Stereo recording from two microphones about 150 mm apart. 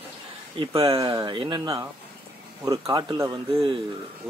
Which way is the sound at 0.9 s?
25° right (ahead or behind).